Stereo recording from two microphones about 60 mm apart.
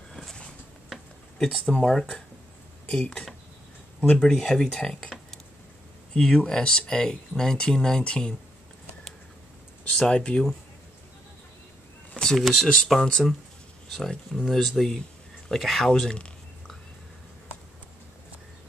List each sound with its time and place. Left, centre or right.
0.1 s a sound: centre
1.7 s speech: centre
6.1 s speech: centre
9.9 s speech: centre
12.4 s speech: centre